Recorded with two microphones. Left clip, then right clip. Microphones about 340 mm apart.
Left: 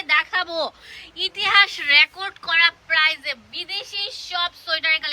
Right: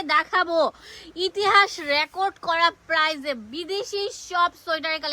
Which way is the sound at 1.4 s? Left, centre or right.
Centre.